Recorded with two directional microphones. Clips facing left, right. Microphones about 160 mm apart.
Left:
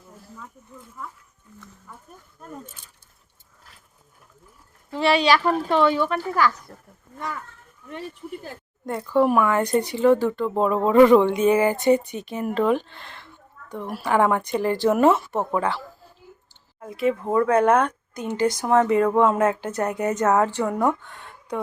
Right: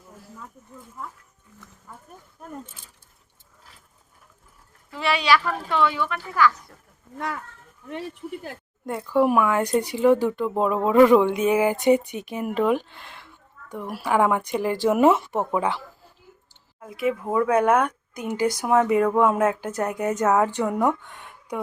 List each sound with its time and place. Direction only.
4.9 s speech: 30° left (ahead or behind)
8.4 s a woman's voice: 5° right (ahead or behind)
16.8 s speech: 5° right (ahead or behind)